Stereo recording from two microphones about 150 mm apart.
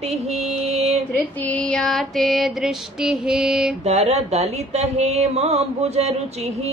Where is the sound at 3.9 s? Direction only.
45° right (ahead or behind).